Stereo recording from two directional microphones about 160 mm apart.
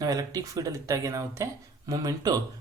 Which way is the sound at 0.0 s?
25° right (ahead or behind).